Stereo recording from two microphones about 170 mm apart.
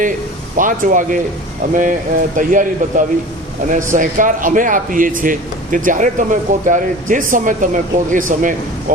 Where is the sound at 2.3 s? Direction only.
50° right (ahead or behind).